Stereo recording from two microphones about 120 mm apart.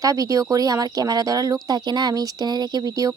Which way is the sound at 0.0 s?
30° right (ahead or behind).